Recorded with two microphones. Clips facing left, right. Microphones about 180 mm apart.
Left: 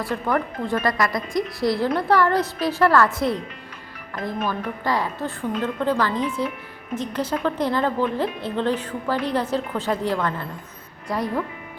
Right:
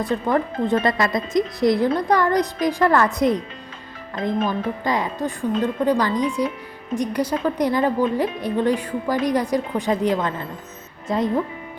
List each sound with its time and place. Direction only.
0.0 s a woman's voice: 20° right (ahead or behind)